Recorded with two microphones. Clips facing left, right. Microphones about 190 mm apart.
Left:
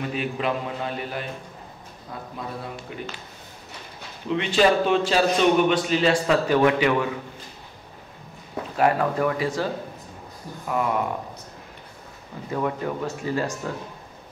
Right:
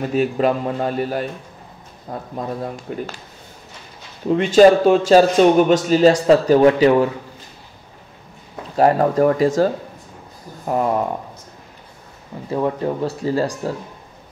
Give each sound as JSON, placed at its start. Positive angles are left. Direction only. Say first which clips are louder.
{"t": 0.0, "sound": "a man's voice", "louder": "right 9 dB", "side_deg": -40}
{"t": 4.3, "sound": "a man's voice", "louder": "right 9 dB", "side_deg": -45}
{"t": 8.7, "sound": "a man's voice", "louder": "right 7 dB", "side_deg": -35}
{"t": 12.4, "sound": "a man's voice", "louder": "right 6 dB", "side_deg": -25}